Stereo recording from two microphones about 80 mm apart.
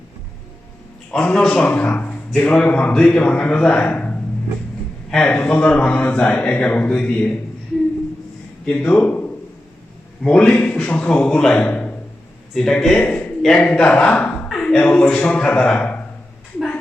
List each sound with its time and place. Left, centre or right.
1.1 s a man's voice: centre
8.6 s a man's voice: centre
11.7 s a sound: centre
12.5 s a man's voice: centre
13.1 s a sound: centre
13.4 s a man's voice: centre